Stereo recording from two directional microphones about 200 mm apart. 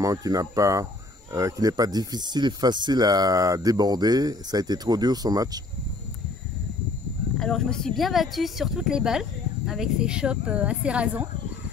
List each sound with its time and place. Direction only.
0.0 s speech: 15° right (ahead or behind)
7.3 s speech: 5° left (ahead or behind)